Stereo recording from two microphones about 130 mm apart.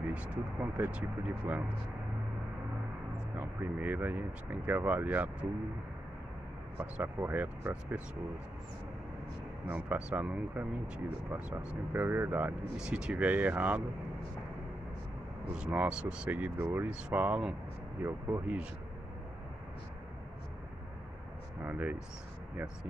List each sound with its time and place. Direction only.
0.1 s speech: 10° right (ahead or behind)
3.3 s speech: 15° right (ahead or behind)
6.8 s speech: 15° right (ahead or behind)
9.7 s speech: 10° right (ahead or behind)
15.5 s speech: 10° right (ahead or behind)
21.6 s speech: 10° right (ahead or behind)